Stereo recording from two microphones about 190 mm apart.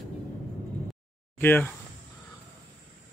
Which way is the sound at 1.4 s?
10° left (ahead or behind).